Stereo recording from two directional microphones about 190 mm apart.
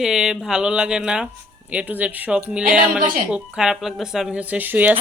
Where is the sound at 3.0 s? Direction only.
45° right (ahead or behind).